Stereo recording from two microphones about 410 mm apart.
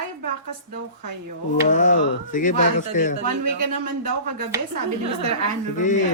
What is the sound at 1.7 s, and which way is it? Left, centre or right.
Speech, centre.